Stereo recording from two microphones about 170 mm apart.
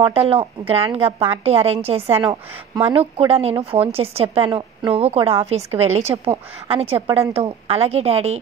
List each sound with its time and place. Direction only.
0.0 s a woman's voice: 35° right (ahead or behind)